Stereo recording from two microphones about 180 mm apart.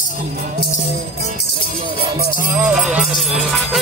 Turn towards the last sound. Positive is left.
turn(degrees=0)  # may be behind; listen again after turning